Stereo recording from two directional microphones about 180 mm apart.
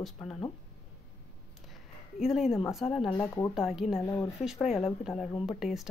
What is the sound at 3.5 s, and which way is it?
Speech, centre (ahead or behind).